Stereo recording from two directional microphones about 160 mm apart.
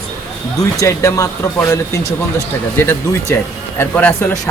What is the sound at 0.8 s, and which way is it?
Speech, 20° left (ahead or behind).